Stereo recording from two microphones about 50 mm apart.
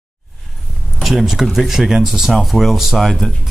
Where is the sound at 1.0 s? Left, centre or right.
Centre.